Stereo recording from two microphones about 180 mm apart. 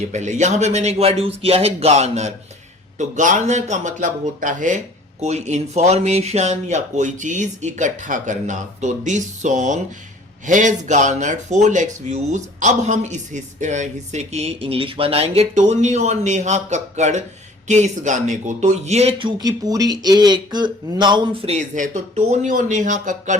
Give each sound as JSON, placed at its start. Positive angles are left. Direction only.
{"t": 0.1, "sound": "speech", "side_deg": -40}
{"t": 19.4, "sound": "speech", "side_deg": -20}